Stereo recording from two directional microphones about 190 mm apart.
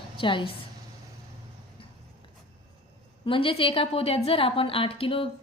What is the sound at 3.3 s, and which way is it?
A woman's voice, 30° left (ahead or behind).